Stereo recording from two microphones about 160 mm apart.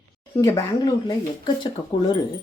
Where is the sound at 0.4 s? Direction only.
20° left (ahead or behind).